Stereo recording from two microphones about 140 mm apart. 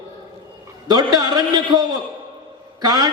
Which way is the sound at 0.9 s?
30° right (ahead or behind).